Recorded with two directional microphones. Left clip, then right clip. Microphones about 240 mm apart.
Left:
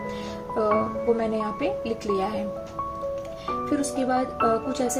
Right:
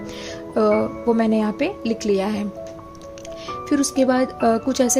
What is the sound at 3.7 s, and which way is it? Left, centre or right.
A woman's voice, right.